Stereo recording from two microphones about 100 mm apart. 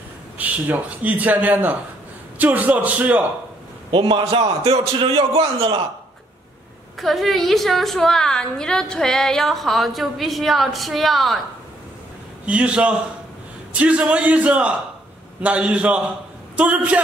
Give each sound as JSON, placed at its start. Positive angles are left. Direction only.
{"t": 0.4, "sound": "speech", "side_deg": -15}
{"t": 3.9, "sound": "a man's voice", "side_deg": -55}
{"t": 7.0, "sound": "a woman's voice", "side_deg": 0}
{"t": 12.4, "sound": "speech", "side_deg": -10}